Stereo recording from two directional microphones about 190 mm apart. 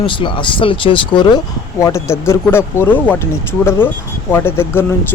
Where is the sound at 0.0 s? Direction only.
25° left (ahead or behind).